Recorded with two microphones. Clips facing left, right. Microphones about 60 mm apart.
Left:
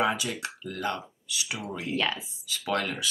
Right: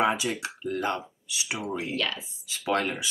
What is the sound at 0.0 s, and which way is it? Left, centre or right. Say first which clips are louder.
Speech: right 2 dB; right.